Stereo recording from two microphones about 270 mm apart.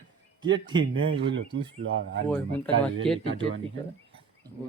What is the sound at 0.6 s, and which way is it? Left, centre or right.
Speech, centre.